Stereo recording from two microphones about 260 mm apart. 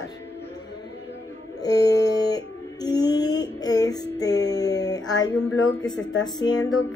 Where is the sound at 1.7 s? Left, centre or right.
Centre.